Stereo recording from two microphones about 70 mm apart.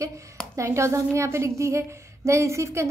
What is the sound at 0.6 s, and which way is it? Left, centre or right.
A woman's voice, right.